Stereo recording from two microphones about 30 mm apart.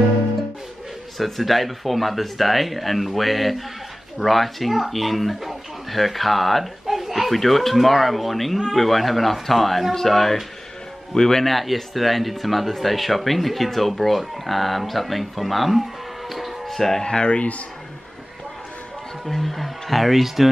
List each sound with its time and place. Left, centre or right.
1.1 s speech: centre
7.0 s a sound: centre
7.3 s speech: centre
11.1 s speech: centre
11.4 s speech: centre
16.6 s speech: centre
17.0 s speech: left
19.2 s speech: centre